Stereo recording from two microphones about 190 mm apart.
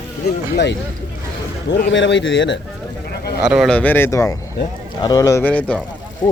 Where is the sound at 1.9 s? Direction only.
70° left (ahead or behind).